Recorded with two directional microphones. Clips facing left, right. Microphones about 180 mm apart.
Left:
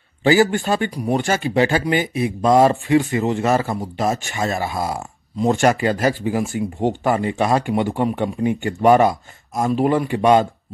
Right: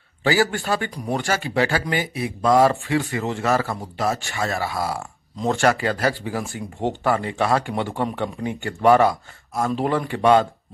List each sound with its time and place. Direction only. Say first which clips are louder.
0.2 s speech: left 5 dB; 20° left (ahead or behind)